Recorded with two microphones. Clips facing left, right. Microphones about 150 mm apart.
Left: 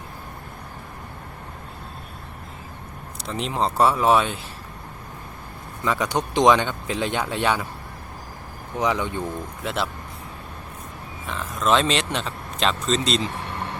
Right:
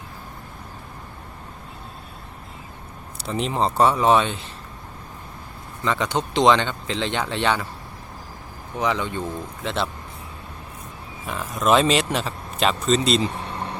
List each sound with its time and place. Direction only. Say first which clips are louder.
3.2 s speech: right 2 dB; centre (ahead or behind)
5.8 s speech: even; 10° left (ahead or behind)
8.7 s speech: even; 15° left (ahead or behind)
11.3 s speech: right 2 dB; 10° right (ahead or behind)
13.3 s vehicle: right 1 dB; 20° right (ahead or behind)